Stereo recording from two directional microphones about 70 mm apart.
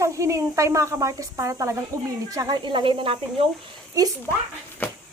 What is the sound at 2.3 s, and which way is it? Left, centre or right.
Speech, right.